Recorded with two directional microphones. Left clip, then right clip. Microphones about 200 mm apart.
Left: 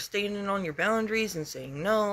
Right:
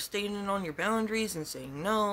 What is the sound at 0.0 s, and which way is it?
Speech, 20° right (ahead or behind).